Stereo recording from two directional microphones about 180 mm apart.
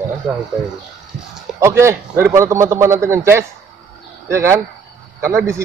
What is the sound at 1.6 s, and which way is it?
A man's voice, 15° right (ahead or behind).